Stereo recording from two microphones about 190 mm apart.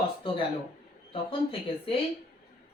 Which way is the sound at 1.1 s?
25° left (ahead or behind).